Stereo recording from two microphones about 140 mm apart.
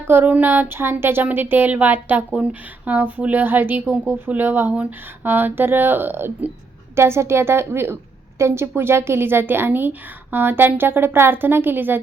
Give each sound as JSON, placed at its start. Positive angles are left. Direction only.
{"t": 0.1, "sound": "speech", "side_deg": -15}